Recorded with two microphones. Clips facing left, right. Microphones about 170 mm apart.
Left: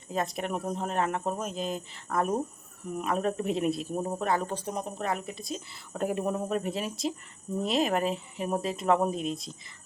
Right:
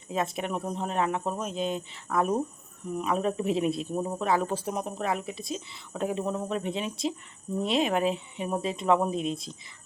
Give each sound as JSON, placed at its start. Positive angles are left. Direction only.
{"t": 0.1, "sound": "a man's voice", "side_deg": 0}